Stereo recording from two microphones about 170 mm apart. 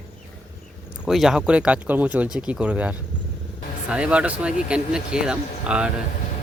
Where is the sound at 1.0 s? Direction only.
Centre (ahead or behind).